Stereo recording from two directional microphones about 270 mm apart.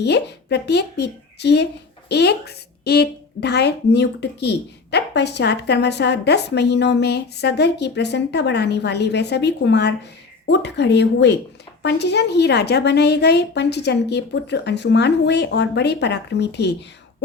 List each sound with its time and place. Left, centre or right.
0.0 s a woman's voice: left